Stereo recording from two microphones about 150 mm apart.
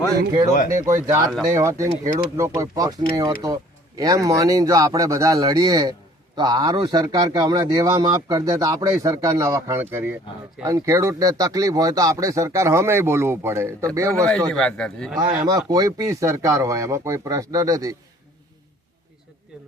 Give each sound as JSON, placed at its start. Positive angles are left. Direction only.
{"t": 0.7, "sound": "a man's voice", "side_deg": -20}
{"t": 14.3, "sound": "a man's voice", "side_deg": 5}
{"t": 15.4, "sound": "a man's voice", "side_deg": -25}